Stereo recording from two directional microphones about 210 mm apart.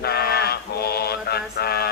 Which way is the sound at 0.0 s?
50° left (ahead or behind).